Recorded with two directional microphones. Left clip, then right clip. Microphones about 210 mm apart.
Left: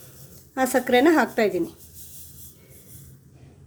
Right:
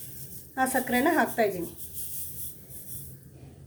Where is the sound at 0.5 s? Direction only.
50° left (ahead or behind).